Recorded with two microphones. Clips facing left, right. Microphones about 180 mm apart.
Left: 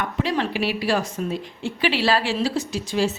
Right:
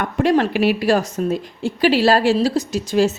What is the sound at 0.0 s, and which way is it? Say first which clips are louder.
A woman's voice: right 7 dB; 50° right (ahead or behind).